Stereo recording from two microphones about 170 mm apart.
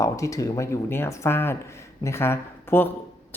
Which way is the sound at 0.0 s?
20° left (ahead or behind).